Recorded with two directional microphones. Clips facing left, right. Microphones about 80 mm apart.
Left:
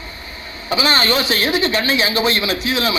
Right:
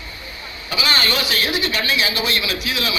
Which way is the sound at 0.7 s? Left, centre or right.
Left.